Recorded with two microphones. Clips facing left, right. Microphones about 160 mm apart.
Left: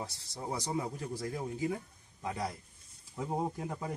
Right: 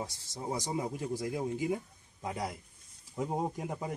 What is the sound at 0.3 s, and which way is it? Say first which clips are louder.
A man's voice: right 1 dB; 20° right (ahead or behind).